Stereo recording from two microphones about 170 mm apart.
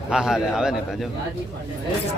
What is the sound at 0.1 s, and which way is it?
Speech, 5° right (ahead or behind).